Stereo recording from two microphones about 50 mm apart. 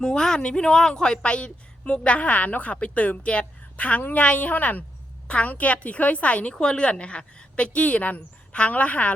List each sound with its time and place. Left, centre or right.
0.0 s a woman's voice: centre; by 9.1 s left